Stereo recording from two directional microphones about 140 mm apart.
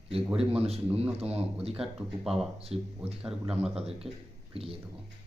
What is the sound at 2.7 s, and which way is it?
A man's voice, 45° right (ahead or behind).